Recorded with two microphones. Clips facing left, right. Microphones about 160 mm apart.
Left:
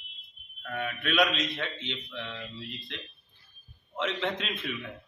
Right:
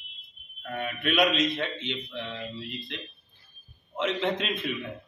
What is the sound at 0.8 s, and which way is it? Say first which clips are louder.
Speech: right 2 dB; 10° right (ahead or behind).